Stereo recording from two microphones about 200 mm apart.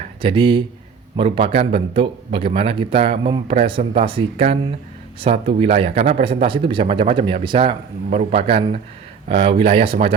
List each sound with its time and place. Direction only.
0.2 s speech: 25° right (ahead or behind)